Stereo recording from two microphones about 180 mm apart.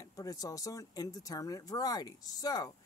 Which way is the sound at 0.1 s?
20° left (ahead or behind).